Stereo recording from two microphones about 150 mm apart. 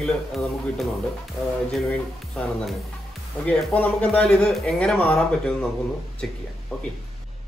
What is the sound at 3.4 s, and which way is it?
A man's voice, 10° left (ahead or behind).